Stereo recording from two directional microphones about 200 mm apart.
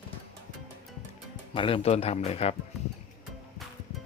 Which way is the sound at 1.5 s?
25° left (ahead or behind).